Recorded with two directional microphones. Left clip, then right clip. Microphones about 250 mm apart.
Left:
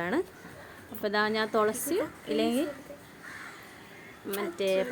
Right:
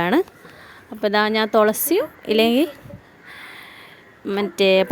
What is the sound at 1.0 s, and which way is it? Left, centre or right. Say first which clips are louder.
Speech: right 9 dB; right.